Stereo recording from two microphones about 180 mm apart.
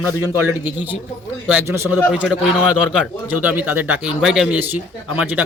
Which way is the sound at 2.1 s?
5° right (ahead or behind).